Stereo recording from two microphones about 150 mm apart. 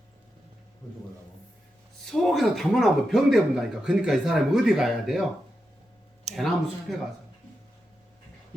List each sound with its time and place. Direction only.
2.0 s speech: centre (ahead or behind)
6.3 s a sound: 50° right (ahead or behind)
6.9 s speech: centre (ahead or behind)